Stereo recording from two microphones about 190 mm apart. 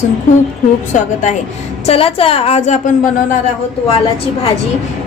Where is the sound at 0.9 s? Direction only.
40° left (ahead or behind).